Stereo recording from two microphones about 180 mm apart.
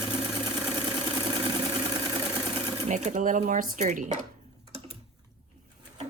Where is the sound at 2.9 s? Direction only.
40° right (ahead or behind).